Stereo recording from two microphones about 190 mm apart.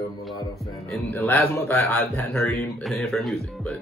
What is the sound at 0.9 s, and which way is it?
A man's voice, 10° left (ahead or behind).